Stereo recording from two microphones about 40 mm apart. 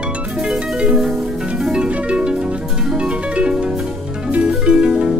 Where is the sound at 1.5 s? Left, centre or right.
Centre.